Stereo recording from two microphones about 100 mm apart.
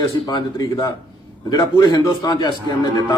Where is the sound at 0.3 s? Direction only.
40° left (ahead or behind).